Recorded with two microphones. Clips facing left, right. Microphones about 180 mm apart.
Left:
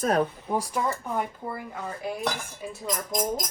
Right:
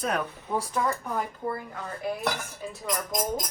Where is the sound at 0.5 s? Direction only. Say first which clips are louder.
Right 2 dB; 15° left (ahead or behind).